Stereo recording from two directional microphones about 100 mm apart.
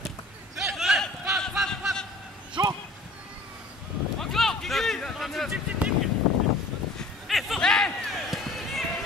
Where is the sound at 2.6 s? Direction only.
45° right (ahead or behind).